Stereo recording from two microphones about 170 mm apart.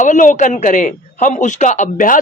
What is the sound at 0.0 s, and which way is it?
A man's voice, 45° left (ahead or behind).